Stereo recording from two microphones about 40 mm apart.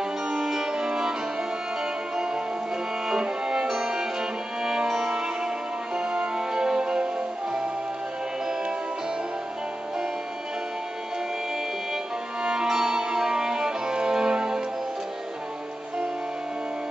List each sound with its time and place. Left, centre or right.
0.3 s music: centre
3.1 s music: centre
12.4 s music: centre